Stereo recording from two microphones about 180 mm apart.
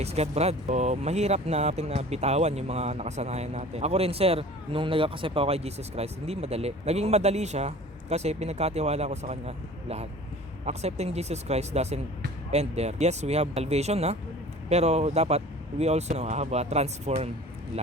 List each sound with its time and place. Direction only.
0.0 s speech: 35° right (ahead or behind)